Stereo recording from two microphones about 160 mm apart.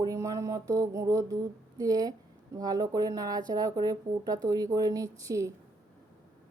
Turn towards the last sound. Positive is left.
turn(degrees=-20)  # may be behind; listen again after turning